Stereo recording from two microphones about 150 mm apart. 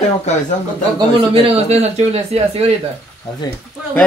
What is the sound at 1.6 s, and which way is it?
Speech, 45° right (ahead or behind).